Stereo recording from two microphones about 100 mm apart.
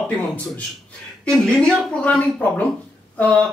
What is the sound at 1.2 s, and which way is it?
Speech, 10° left (ahead or behind).